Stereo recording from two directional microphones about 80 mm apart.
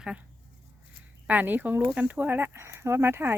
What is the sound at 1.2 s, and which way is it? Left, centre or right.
Speech, right.